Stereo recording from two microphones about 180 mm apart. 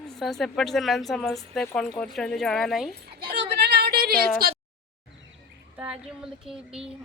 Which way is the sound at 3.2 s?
60° right (ahead or behind).